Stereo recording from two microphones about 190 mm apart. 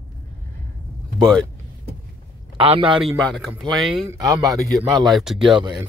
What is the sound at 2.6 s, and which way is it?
Speech, 25° right (ahead or behind).